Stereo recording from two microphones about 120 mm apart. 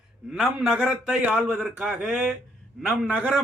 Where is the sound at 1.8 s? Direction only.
Centre (ahead or behind).